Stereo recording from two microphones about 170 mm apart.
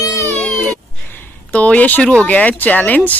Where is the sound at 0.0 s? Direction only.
20° left (ahead or behind).